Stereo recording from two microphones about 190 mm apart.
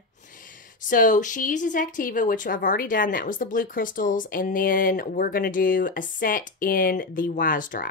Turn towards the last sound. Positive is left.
turn(degrees=45)  # may be behind; listen again after turning